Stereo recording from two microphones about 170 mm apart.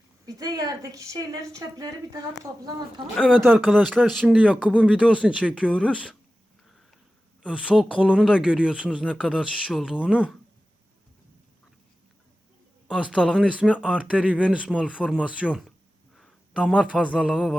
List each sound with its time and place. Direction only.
0.3 s speech: 20° right (ahead or behind)
3.2 s speech: 5° left (ahead or behind)
7.4 s speech: 5° right (ahead or behind)
12.9 s speech: 5° right (ahead or behind)